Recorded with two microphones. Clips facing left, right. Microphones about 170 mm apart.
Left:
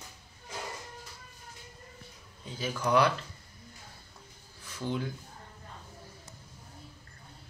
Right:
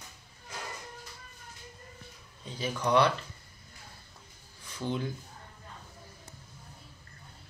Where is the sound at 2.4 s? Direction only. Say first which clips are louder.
Right 1 dB; 5° left (ahead or behind).